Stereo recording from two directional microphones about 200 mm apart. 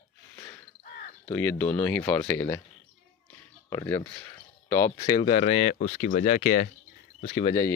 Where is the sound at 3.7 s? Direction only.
15° left (ahead or behind).